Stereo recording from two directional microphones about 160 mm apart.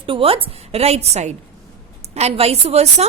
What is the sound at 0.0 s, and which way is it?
Speech, 35° right (ahead or behind).